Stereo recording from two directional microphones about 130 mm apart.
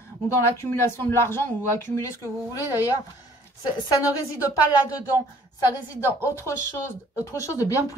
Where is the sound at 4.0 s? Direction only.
25° left (ahead or behind).